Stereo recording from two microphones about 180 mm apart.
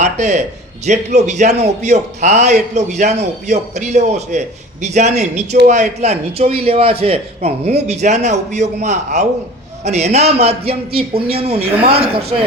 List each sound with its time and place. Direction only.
0.0 s a man's voice: 40° right (ahead or behind)